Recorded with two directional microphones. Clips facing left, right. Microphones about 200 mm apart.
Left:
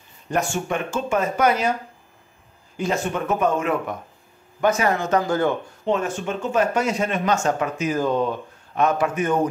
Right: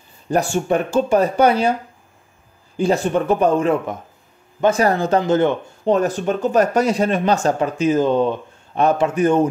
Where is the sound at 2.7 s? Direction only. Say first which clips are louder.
Right 6 dB; 30° right (ahead or behind).